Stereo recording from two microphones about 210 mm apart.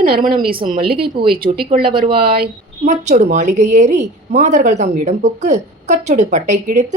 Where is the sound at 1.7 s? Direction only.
25° right (ahead or behind).